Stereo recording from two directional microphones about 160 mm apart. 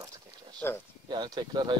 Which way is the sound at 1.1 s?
30° right (ahead or behind).